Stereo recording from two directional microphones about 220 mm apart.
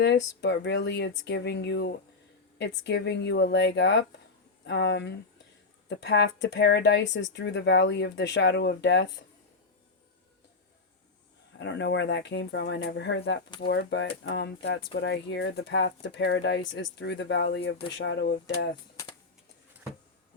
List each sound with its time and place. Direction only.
0.0 s speech: 55° left (ahead or behind)
11.5 s speech: 55° left (ahead or behind)